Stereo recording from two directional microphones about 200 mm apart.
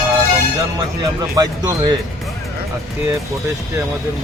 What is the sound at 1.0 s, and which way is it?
Speech, 20° right (ahead or behind).